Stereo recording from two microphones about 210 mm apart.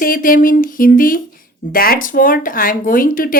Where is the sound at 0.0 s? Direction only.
40° left (ahead or behind).